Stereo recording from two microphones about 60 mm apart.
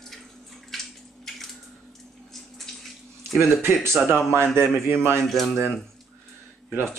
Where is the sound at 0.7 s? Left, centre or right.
Centre.